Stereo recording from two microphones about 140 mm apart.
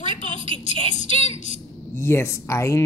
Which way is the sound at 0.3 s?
40° right (ahead or behind).